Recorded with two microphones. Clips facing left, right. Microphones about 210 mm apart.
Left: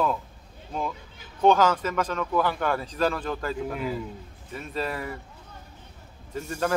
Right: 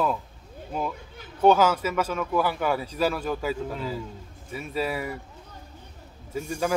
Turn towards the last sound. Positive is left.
turn(degrees=-10)  # may be behind; listen again after turning